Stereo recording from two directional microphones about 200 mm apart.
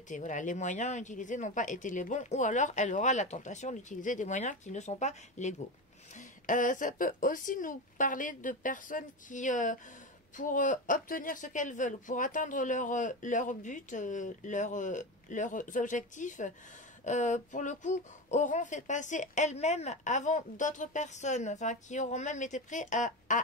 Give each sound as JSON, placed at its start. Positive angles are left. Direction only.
{"t": 0.1, "sound": "speech", "side_deg": 40}